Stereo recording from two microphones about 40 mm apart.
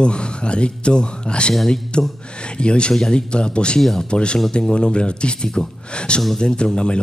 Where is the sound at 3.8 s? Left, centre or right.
Centre.